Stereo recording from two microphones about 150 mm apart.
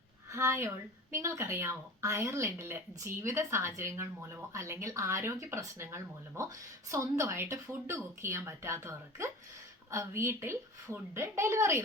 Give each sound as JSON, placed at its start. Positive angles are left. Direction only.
{"t": 0.3, "sound": "a woman's voice", "side_deg": -15}